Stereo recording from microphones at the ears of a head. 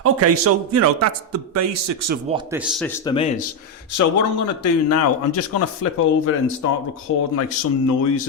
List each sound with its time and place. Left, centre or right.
0.0 s a man's voice: right
2.6 s speech: left